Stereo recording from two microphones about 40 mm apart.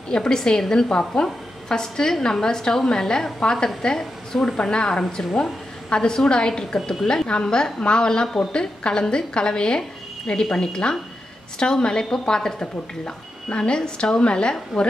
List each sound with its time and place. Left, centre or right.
0.1 s a woman's voice: centre